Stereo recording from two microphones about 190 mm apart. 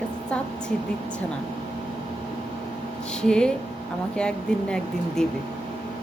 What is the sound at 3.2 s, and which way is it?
Speech, 5° left (ahead or behind).